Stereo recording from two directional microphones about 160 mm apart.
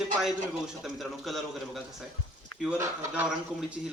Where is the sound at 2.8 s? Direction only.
20° right (ahead or behind).